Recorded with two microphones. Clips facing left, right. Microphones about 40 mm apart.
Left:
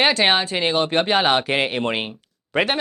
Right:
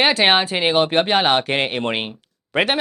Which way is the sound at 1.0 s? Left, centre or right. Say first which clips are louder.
Right 1 dB; centre.